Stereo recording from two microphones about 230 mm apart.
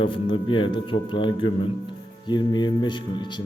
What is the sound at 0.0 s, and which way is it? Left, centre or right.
A man's voice, left.